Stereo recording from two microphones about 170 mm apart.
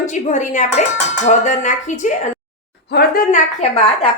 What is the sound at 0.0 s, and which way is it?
A woman's voice, 45° left (ahead or behind).